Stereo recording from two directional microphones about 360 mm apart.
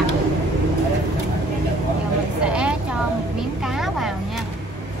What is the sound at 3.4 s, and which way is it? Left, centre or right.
Vehicle, centre.